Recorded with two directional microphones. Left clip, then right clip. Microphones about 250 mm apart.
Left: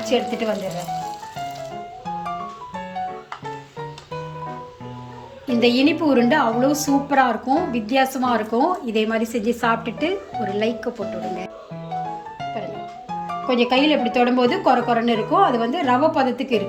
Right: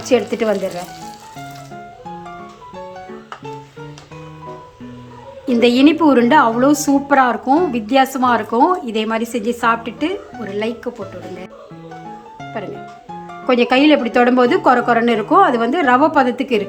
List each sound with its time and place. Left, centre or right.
0.0 s a woman's voice: centre
5.5 s a woman's voice: centre
13.5 s a woman's voice: centre